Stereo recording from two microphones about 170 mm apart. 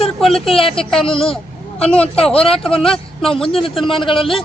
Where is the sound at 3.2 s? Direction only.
5° left (ahead or behind).